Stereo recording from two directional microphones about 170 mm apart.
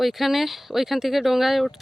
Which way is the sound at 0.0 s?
Centre (ahead or behind).